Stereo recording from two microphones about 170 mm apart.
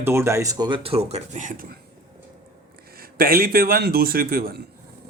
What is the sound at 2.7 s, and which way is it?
Speech, 65° right (ahead or behind).